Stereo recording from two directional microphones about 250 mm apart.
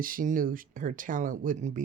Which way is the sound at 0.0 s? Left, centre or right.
Right.